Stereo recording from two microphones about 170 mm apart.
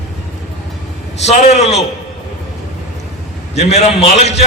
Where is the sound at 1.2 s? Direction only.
40° left (ahead or behind).